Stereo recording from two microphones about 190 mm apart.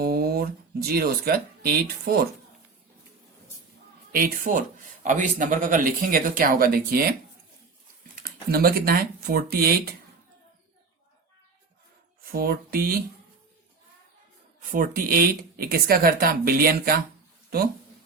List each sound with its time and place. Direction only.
0.0 s speech: 55° right (ahead or behind)
4.1 s a man's voice: 45° right (ahead or behind)
12.2 s speech: 50° right (ahead or behind)
14.7 s a man's voice: 50° right (ahead or behind)